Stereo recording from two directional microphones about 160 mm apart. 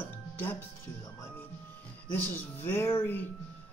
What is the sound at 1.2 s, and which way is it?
Music, 15° left (ahead or behind).